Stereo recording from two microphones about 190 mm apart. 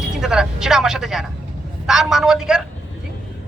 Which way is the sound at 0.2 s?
5° right (ahead or behind).